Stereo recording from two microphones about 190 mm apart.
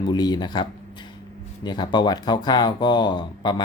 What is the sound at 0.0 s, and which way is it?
Speech, 20° left (ahead or behind).